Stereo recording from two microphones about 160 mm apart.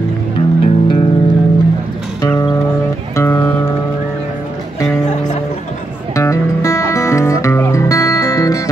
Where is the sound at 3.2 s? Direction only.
15° left (ahead or behind).